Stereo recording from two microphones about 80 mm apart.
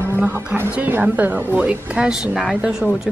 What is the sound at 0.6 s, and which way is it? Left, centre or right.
A woman's voice, right.